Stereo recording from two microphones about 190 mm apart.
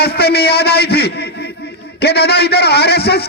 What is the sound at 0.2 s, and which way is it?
A man's voice, 55° left (ahead or behind).